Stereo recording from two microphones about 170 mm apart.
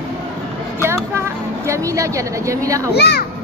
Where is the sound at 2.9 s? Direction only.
75° left (ahead or behind).